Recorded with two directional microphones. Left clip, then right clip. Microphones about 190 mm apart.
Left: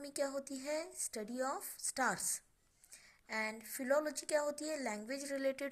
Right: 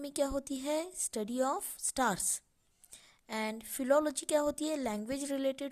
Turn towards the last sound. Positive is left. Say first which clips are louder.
# right 3 dB
turn(degrees=-45)  # may be behind; listen again after turning